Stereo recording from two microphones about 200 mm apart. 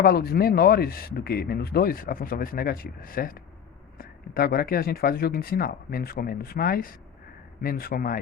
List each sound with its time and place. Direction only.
0.0 s speech: 50° left (ahead or behind)